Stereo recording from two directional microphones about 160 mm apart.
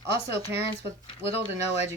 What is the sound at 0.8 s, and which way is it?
Speech, 35° left (ahead or behind).